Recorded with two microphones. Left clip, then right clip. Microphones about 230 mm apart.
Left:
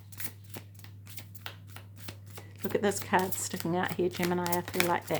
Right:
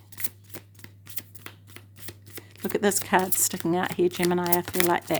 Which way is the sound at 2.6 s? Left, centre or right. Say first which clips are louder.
Right 5 dB; right.